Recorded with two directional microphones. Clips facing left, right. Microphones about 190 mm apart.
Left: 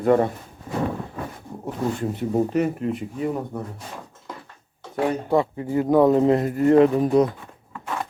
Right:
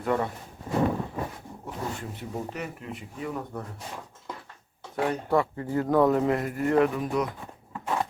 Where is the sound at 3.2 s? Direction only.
25° left (ahead or behind).